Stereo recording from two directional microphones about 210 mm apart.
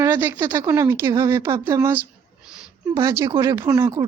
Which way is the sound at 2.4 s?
5° right (ahead or behind).